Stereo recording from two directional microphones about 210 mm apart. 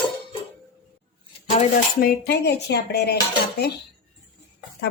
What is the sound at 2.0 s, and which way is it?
Speech, 50° left (ahead or behind).